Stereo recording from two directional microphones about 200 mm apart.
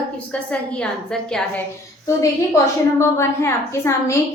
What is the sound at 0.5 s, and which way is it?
A woman's voice, 5° left (ahead or behind).